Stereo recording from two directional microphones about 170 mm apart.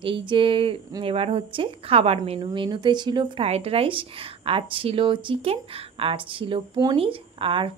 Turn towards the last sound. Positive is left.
turn(degrees=-30)  # may be behind; listen again after turning